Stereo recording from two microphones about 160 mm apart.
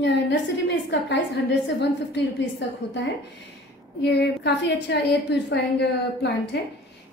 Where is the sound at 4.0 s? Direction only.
90° left.